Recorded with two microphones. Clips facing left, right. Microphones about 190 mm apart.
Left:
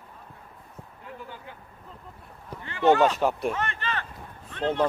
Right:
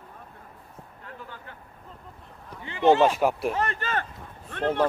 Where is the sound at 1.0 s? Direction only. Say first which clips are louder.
Left 2 dB; 15° left (ahead or behind).